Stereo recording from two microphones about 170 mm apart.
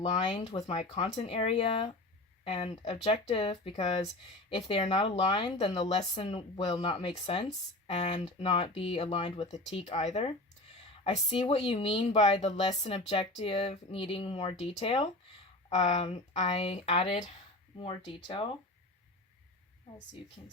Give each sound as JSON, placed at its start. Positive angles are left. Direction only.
{"t": 0.0, "sound": "speech", "side_deg": 30}